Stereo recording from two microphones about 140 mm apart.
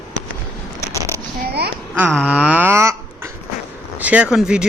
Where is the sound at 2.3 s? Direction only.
10° right (ahead or behind).